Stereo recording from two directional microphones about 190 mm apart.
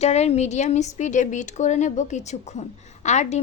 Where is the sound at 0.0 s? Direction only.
35° left (ahead or behind).